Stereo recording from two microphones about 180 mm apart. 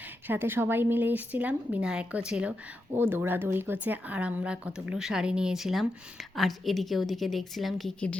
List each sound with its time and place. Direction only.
0.3 s a woman's voice: 10° right (ahead or behind); by 8.2 s 5° left (ahead or behind)